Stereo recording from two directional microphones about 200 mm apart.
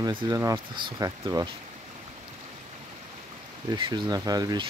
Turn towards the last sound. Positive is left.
turn(degrees=-20)  # may be behind; listen again after turning